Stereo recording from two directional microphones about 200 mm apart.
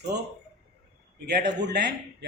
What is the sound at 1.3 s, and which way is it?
Speech, 55° right (ahead or behind).